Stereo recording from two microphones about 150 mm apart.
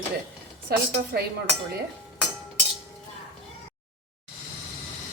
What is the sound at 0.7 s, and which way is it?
Speech, 90° right.